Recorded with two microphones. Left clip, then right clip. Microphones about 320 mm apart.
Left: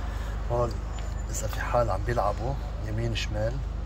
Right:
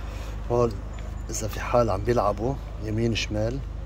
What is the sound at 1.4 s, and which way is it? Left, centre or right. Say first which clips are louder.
Speech: right 3 dB; right.